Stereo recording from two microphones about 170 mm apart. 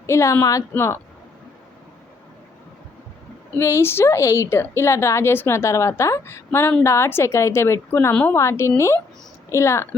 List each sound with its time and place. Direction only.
0.0 s a woman's voice: 15° left (ahead or behind)
3.6 s a woman's voice: 15° left (ahead or behind)